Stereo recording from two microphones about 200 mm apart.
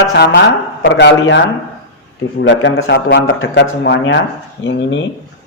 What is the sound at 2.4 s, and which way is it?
A man's voice, 70° left (ahead or behind).